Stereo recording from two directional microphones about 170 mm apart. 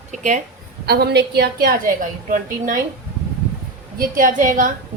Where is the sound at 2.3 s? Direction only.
50° right (ahead or behind).